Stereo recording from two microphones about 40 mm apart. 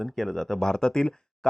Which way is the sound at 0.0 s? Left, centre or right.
Centre.